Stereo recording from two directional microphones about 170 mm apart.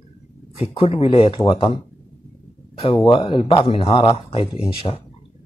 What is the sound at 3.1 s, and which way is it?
Speech, 30° left (ahead or behind).